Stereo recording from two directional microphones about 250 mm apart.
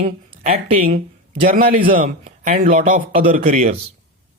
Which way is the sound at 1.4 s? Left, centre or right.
Right.